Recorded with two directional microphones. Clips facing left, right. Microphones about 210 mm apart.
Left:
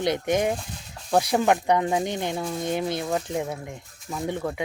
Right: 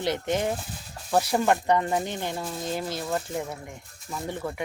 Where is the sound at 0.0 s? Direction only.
15° left (ahead or behind).